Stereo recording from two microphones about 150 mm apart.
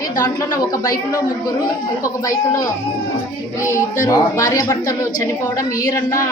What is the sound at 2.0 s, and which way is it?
Speech, 20° left (ahead or behind).